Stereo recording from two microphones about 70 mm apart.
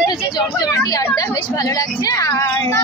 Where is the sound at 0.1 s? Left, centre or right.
Left.